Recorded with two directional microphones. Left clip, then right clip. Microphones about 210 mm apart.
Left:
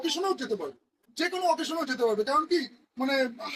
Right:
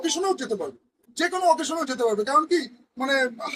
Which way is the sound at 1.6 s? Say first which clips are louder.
Right 3 dB; 50° right (ahead or behind).